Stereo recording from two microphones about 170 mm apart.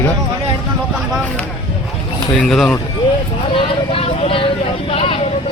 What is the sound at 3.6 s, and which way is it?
Vehicle, 35° left (ahead or behind).